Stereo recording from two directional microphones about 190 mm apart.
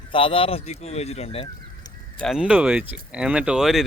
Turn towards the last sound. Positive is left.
turn(degrees=0)  # may be behind; listen again after turning